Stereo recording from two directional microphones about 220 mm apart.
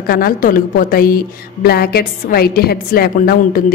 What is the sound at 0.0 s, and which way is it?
A woman's voice, 40° left (ahead or behind).